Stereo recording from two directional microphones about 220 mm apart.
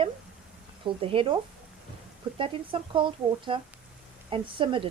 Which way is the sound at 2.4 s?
25° right (ahead or behind).